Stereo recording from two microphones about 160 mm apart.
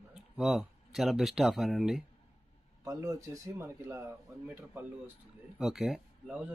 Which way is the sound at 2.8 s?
20° right (ahead or behind).